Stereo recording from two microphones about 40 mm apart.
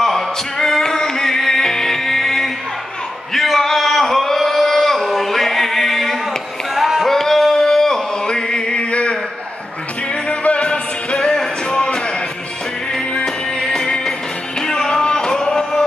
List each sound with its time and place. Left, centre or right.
0.0 s music: centre
3.3 s a sound: centre
7.1 s singing: centre; by 9.2 s left
10.2 s music: left; by 15.8 s centre